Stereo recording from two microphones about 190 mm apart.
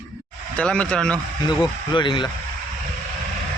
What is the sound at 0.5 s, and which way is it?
Speech, 5° left (ahead or behind).